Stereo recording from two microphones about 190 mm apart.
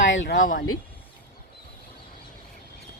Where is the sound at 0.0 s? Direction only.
75° left (ahead or behind).